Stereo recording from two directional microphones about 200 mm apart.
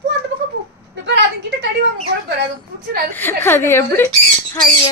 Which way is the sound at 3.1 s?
10° left (ahead or behind).